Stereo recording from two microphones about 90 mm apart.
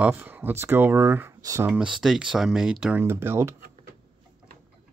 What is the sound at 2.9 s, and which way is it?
Speech, 25° right (ahead or behind).